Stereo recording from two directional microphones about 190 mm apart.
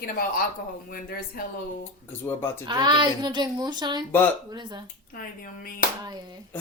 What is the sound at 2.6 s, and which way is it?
Speech, 25° right (ahead or behind).